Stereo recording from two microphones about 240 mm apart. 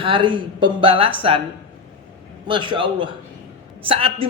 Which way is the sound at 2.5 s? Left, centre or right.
Right.